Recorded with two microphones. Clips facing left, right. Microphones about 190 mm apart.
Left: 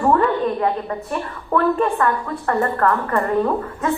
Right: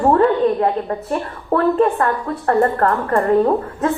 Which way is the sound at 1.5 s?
35° right (ahead or behind).